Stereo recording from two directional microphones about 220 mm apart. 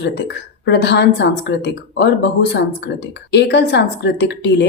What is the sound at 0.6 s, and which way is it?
A woman's voice, 50° left (ahead or behind).